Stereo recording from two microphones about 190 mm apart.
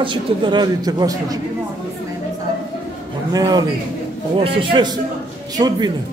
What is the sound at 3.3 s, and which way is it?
A man's voice, 20° right (ahead or behind).